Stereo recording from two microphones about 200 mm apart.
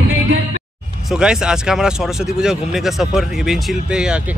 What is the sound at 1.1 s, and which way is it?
Speech, 5° right (ahead or behind).